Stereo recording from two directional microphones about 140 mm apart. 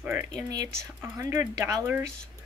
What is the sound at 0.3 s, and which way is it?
Speech, 25° right (ahead or behind).